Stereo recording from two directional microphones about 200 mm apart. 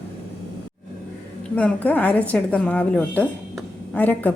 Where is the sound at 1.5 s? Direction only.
5° left (ahead or behind).